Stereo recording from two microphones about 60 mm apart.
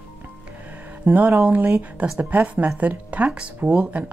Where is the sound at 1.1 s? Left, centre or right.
Right.